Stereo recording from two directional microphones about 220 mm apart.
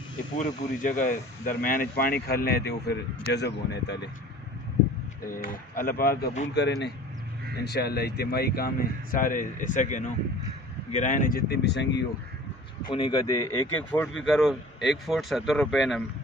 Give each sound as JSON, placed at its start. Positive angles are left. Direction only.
{"t": 0.4, "sound": "speech", "side_deg": 35}
{"t": 5.3, "sound": "speech", "side_deg": 40}
{"t": 6.5, "sound": "speech", "side_deg": 50}
{"t": 12.8, "sound": "speech", "side_deg": 20}
{"t": 14.1, "sound": "speech", "side_deg": 0}